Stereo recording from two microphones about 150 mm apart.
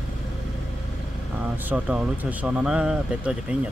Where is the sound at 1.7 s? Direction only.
10° right (ahead or behind).